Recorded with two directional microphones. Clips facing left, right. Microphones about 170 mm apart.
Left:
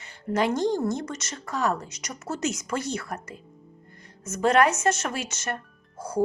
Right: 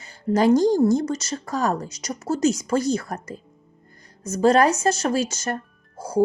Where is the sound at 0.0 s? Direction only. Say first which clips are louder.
Right 6 dB; 35° right (ahead or behind).